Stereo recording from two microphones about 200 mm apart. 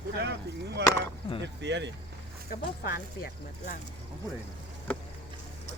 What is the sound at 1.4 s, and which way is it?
Speech, 60° right (ahead or behind).